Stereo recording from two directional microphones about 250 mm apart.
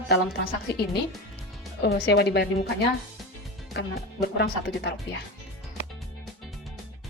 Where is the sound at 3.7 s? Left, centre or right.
Left.